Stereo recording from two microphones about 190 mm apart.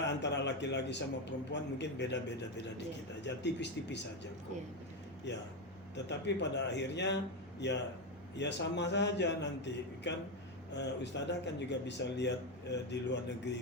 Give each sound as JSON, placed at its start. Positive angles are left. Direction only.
{"t": 0.2, "sound": "a man's voice", "side_deg": 65}
{"t": 6.1, "sound": "a man's voice", "side_deg": 65}